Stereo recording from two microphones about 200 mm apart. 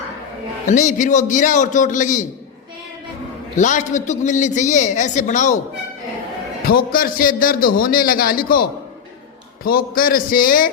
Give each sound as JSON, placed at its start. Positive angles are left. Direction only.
{"t": 0.7, "sound": "a man's voice", "side_deg": 40}
{"t": 3.6, "sound": "a man's voice", "side_deg": 40}
{"t": 6.7, "sound": "a man's voice", "side_deg": 45}
{"t": 9.6, "sound": "a man's voice", "side_deg": 45}